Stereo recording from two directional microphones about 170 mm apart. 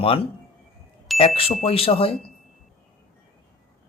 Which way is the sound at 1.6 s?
35° left (ahead or behind).